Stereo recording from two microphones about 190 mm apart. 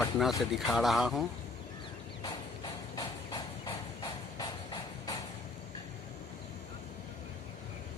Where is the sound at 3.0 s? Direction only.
20° left (ahead or behind).